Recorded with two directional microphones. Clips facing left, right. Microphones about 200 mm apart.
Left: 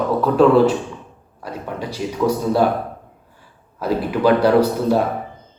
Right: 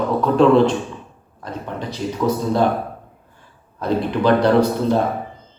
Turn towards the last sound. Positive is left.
turn(degrees=10)  # may be behind; listen again after turning